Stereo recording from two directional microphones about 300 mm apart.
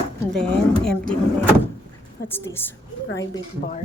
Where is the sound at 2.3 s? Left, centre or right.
Centre.